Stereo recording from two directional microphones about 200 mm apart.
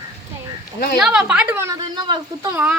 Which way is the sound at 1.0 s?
5° right (ahead or behind).